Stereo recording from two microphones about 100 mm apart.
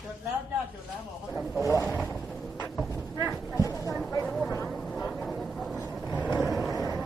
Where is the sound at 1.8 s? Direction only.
20° left (ahead or behind).